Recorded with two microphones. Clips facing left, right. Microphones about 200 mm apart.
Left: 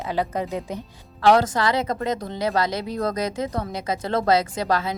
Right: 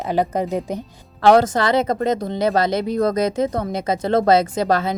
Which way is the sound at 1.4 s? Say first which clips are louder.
Right 5 dB; 25° right (ahead or behind).